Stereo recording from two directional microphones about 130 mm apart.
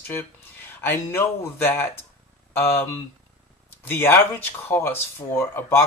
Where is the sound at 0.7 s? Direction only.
15° left (ahead or behind).